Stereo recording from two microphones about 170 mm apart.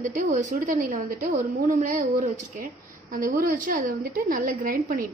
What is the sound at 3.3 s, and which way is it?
A woman's voice, 55° right (ahead or behind).